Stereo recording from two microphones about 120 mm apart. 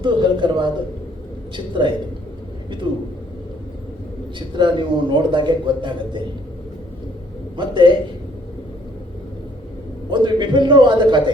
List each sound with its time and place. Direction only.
0.0 s a man's voice: 40° right (ahead or behind)
4.4 s a man's voice: 40° right (ahead or behind)
7.5 s a man's voice: 40° right (ahead or behind)
10.1 s a man's voice: 40° right (ahead or behind)